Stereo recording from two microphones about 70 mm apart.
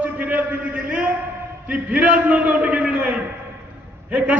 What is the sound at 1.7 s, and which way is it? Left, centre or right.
A man's voice, right.